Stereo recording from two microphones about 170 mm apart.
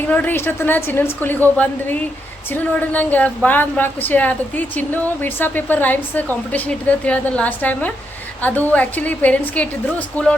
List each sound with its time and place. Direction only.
0.1 s a woman's voice: 10° left (ahead or behind)